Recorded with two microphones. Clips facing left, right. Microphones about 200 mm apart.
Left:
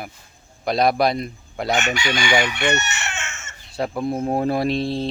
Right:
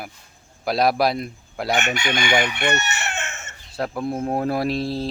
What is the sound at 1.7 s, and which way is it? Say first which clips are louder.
Chicken: even; 55° right (ahead or behind).